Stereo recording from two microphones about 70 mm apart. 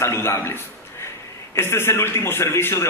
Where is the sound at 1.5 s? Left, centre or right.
Left.